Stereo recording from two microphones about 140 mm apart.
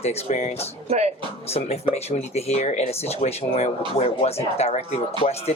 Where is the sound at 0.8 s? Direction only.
50° right (ahead or behind).